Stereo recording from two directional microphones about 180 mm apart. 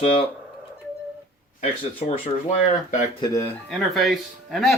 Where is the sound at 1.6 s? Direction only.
30° left (ahead or behind).